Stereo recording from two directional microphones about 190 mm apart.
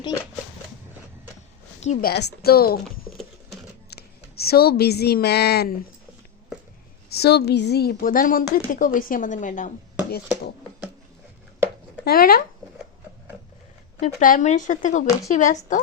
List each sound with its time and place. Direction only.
1.8 s a woman's voice: 40° left (ahead or behind)
2.0 s a woman's voice: 60° left (ahead or behind)
3.8 s a woman's voice: 55° left (ahead or behind)
7.1 s a woman's voice: 60° left (ahead or behind); by 9.7 s 40° left (ahead or behind)
10.1 s speech: 55° left (ahead or behind)
12.0 s a woman's voice: 50° left (ahead or behind)
14.0 s a woman's voice: 40° left (ahead or behind)